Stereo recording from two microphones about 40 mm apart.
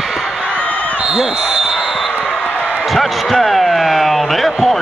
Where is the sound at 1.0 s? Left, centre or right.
Centre.